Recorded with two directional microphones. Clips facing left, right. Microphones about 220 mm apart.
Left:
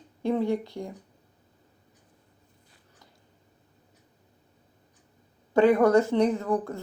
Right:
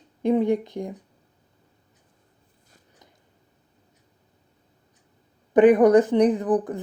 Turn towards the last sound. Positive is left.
turn(degrees=-15)  # may be behind; listen again after turning